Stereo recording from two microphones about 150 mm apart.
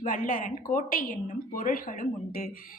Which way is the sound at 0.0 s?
60° left (ahead or behind).